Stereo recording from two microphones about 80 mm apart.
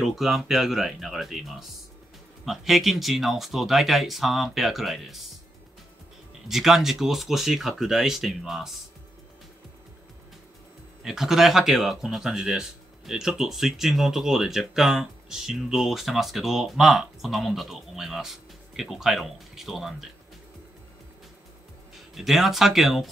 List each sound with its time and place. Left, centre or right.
0.0 s speech: centre
6.4 s speech: centre
11.0 s speech: centre
22.1 s speech: centre